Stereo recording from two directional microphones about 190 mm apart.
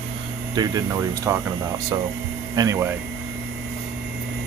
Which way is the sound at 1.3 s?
15° right (ahead or behind).